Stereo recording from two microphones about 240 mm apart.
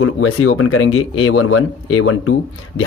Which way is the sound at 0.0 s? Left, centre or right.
Left.